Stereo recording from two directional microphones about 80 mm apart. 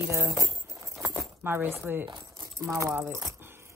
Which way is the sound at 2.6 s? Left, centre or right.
Right.